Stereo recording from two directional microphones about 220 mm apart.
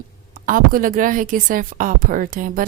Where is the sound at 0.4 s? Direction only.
40° right (ahead or behind).